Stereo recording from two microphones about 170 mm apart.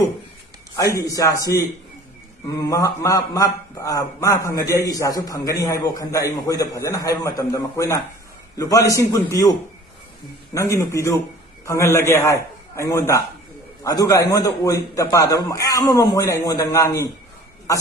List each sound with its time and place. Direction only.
0.8 s a man's voice: 20° left (ahead or behind)